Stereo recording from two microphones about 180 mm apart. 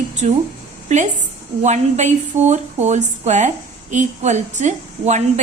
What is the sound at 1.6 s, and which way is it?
A woman's voice, 40° right (ahead or behind).